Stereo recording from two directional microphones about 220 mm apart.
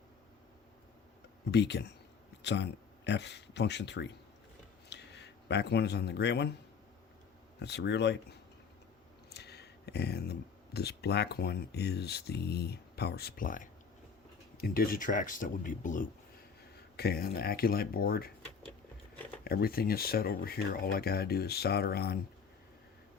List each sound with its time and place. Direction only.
1.5 s speech: 50° left (ahead or behind)
7.6 s speech: 50° left (ahead or behind)
9.3 s a sound: 50° left (ahead or behind)
10.8 s speech: 45° left (ahead or behind)
19.5 s speech: 45° left (ahead or behind)